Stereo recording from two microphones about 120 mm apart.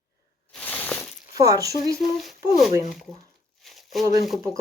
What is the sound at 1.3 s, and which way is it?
Speech, 30° right (ahead or behind).